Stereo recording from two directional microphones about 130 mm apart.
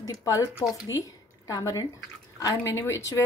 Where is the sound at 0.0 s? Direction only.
25° left (ahead or behind).